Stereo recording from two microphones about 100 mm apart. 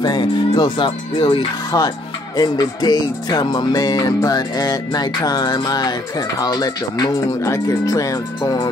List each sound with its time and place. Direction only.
0.0 s speech: 45° left (ahead or behind)
1.7 s music: 40° left (ahead or behind)